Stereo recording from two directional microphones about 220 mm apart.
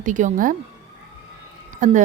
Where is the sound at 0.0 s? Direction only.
35° right (ahead or behind).